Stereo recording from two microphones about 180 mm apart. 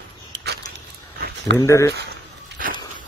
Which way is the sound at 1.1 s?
60° right (ahead or behind).